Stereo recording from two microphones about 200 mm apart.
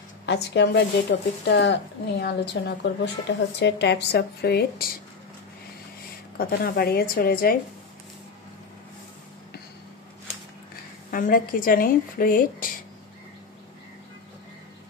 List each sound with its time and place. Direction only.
0.3 s a woman's voice: 60° left (ahead or behind)
6.3 s a woman's voice: 50° left (ahead or behind)
11.1 s a woman's voice: 45° left (ahead or behind)